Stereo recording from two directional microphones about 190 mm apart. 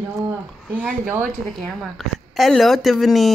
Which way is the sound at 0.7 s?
10° right (ahead or behind).